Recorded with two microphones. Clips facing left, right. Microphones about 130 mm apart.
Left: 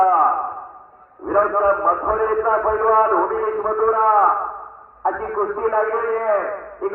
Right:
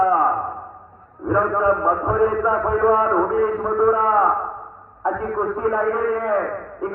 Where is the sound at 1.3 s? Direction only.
35° left (ahead or behind).